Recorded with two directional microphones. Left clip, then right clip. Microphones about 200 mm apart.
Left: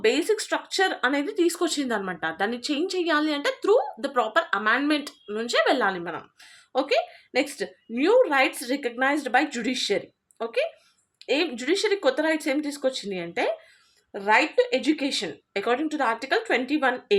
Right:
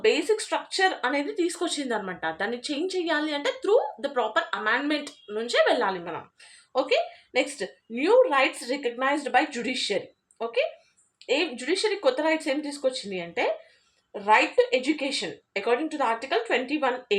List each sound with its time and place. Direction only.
0.0 s speech: 45° left (ahead or behind)